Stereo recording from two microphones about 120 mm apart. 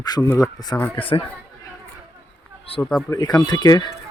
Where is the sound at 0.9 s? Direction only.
45° left (ahead or behind).